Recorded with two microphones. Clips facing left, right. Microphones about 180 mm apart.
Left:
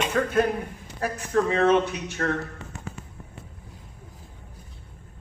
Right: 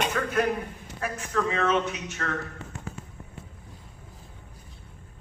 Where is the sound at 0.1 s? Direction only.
30° left (ahead or behind).